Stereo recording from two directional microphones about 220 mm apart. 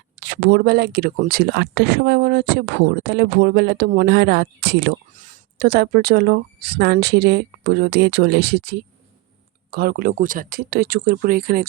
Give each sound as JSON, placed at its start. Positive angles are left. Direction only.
{"t": 0.2, "sound": "speech", "side_deg": -45}